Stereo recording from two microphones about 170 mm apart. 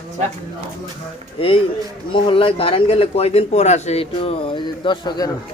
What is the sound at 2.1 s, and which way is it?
A man's voice, 30° left (ahead or behind).